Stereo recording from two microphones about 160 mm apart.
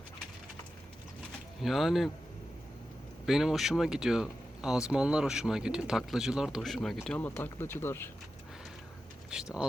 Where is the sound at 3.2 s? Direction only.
Centre (ahead or behind); by 8.1 s 15° left (ahead or behind).